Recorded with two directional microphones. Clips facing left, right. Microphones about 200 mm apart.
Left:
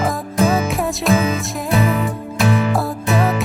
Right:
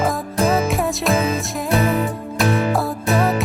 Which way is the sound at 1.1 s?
30° right (ahead or behind).